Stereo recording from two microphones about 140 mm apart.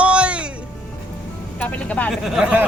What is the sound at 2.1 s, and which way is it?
Speech, 5° right (ahead or behind).